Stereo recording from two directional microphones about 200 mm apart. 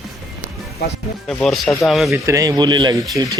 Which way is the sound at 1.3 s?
Centre (ahead or behind).